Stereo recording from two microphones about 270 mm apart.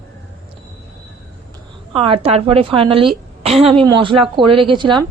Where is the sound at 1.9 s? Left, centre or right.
Centre.